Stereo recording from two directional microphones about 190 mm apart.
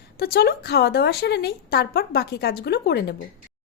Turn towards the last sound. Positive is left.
turn(degrees=60)  # may be behind; listen again after turning